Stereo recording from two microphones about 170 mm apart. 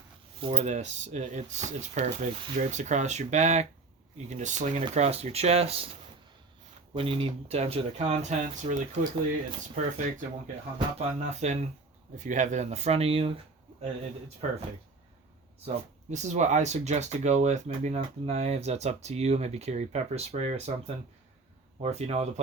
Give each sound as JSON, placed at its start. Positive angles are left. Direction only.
{"t": 0.3, "sound": "speech", "side_deg": -35}
{"t": 6.9, "sound": "speech", "side_deg": -35}
{"t": 10.8, "sound": "speech", "side_deg": -40}
{"t": 14.4, "sound": "speech", "side_deg": -45}
{"t": 15.6, "sound": "speech", "side_deg": -45}